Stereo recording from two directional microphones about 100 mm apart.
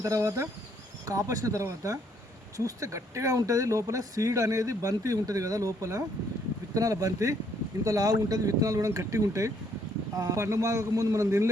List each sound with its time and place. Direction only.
0.0 s speech: 35° right (ahead or behind)